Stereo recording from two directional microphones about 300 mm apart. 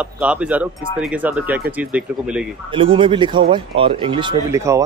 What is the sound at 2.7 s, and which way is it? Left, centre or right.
Speech, centre.